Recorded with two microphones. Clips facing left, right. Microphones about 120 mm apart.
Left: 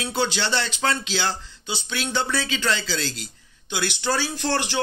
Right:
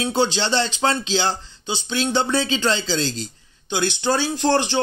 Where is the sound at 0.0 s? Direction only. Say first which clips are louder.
Right 4 dB; 25° right (ahead or behind).